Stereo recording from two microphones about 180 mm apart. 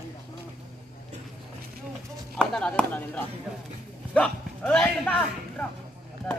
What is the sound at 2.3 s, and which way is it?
Chop, 5° left (ahead or behind).